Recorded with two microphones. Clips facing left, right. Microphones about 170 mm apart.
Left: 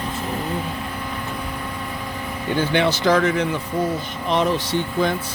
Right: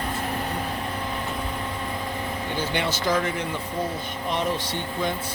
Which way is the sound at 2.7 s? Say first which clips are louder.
Left 7 dB; 75° left (ahead or behind).